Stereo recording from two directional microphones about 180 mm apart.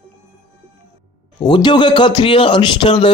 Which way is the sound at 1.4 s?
25° left (ahead or behind).